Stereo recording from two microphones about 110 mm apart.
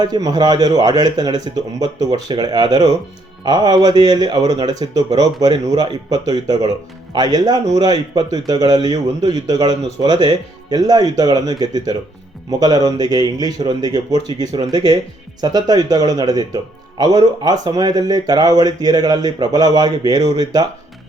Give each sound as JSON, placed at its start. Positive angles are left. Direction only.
{"t": 0.0, "sound": "speech", "side_deg": -35}